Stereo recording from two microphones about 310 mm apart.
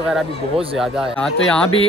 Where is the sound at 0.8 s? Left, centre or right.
Centre.